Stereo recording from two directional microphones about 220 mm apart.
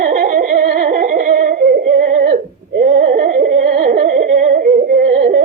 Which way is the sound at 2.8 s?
30° right (ahead or behind).